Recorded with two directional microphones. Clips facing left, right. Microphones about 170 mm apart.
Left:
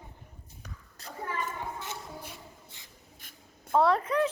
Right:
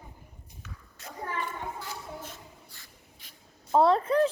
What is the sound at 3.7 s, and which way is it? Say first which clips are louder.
Speech: right 3 dB; 25° right (ahead or behind).